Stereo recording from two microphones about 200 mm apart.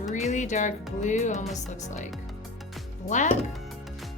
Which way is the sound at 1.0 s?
35° left (ahead or behind).